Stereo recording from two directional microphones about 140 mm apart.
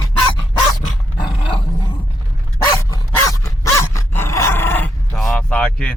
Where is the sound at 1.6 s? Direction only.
35° left (ahead or behind).